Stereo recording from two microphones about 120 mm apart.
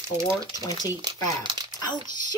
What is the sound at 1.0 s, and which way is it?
Speech, 35° right (ahead or behind).